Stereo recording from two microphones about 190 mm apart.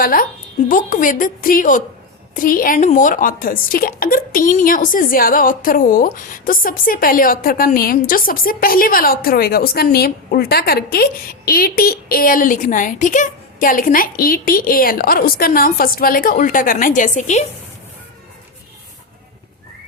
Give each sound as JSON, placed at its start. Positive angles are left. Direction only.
{"t": 0.0, "sound": "a woman's voice", "side_deg": 50}